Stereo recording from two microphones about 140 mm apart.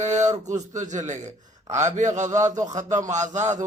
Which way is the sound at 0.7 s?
60° right (ahead or behind).